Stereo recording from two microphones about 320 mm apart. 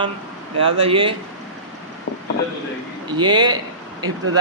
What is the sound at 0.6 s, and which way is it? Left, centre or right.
Speech, centre.